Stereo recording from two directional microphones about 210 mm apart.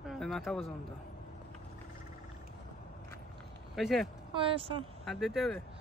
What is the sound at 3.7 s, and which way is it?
Speech, centre (ahead or behind).